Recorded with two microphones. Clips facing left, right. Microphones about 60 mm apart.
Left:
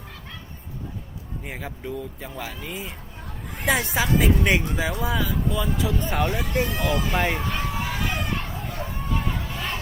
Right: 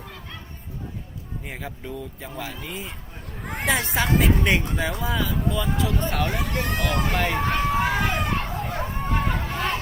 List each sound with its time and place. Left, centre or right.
1.5 s speech: centre
3.4 s children playing: right
3.7 s speech: centre
6.4 s speech: right
7.3 s a sound: right